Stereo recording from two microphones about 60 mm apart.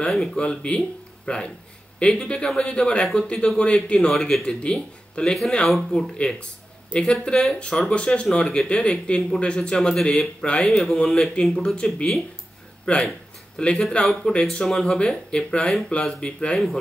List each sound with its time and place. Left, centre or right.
0.1 s speech: centre
0.4 s speech: centre
5.7 s speech: centre
9.9 s speech: centre
10.4 s speech: centre